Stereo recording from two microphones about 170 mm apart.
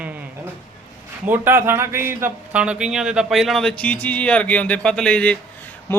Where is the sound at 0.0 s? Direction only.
10° right (ahead or behind).